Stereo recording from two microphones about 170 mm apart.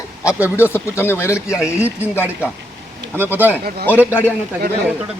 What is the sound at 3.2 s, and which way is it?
Speech, 10° right (ahead or behind).